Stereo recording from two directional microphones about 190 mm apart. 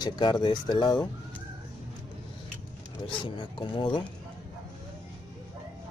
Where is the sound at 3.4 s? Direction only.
25° left (ahead or behind).